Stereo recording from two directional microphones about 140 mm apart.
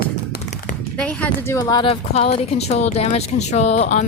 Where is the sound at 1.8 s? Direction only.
45° left (ahead or behind).